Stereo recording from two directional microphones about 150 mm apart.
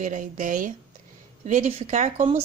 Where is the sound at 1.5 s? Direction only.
50° right (ahead or behind).